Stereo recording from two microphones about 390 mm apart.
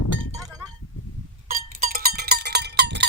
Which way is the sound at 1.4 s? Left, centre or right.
Right.